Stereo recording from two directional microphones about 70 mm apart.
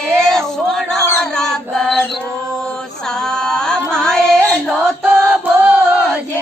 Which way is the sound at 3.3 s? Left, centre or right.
Centre.